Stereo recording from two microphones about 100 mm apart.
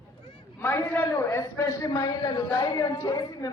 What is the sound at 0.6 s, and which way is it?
A woman's voice, 20° left (ahead or behind).